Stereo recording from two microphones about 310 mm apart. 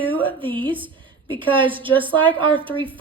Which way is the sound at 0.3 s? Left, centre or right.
Centre.